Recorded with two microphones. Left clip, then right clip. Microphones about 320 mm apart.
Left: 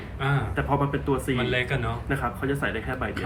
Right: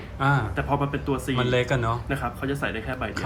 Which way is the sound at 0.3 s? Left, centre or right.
Centre.